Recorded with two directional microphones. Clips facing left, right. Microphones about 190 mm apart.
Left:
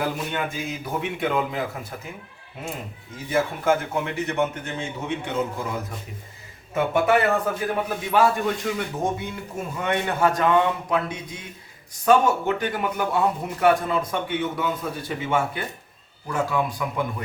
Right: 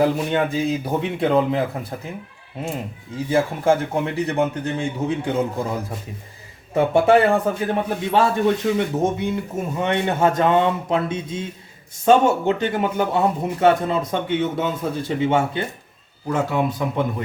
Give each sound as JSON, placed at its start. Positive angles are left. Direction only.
{"t": 0.0, "sound": "a man's voice", "side_deg": -35}
{"t": 3.2, "sound": "a man's voice", "side_deg": -30}
{"t": 6.7, "sound": "a man's voice", "side_deg": -30}